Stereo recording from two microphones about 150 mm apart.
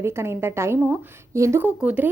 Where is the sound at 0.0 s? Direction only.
15° right (ahead or behind).